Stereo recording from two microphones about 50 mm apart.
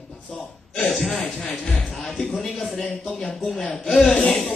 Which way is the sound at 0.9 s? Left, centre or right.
Centre.